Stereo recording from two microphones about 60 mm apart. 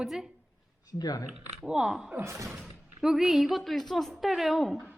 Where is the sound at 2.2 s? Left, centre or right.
Right.